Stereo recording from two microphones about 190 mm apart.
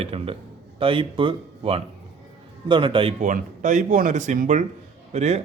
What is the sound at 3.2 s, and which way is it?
A man's voice, 40° right (ahead or behind).